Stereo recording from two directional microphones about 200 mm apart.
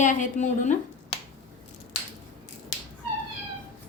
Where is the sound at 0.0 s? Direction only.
40° left (ahead or behind).